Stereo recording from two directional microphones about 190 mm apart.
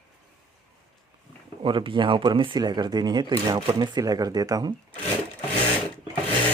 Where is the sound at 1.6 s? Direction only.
25° right (ahead or behind).